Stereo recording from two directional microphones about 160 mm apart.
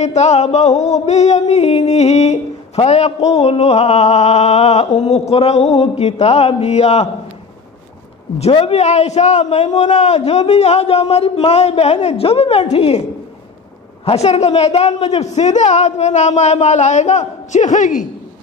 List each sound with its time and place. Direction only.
0.0 s music: 45° left (ahead or behind)
5.3 s a man's voice: 40° left (ahead or behind)
8.4 s a man's voice: 35° left (ahead or behind)
14.0 s music: 40° left (ahead or behind)